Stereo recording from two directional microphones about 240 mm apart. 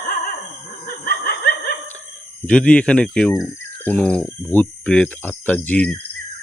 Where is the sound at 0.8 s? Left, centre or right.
Left.